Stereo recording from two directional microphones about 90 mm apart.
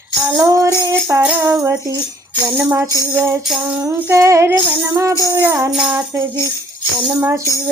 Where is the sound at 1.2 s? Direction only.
15° right (ahead or behind).